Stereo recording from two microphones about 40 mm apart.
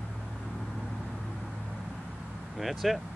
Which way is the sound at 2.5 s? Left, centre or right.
Centre.